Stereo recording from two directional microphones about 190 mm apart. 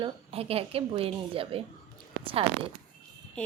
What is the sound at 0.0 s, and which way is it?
A woman's voice, 30° right (ahead or behind).